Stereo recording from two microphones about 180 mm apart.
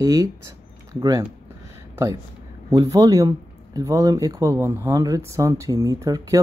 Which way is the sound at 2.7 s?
20° right (ahead or behind).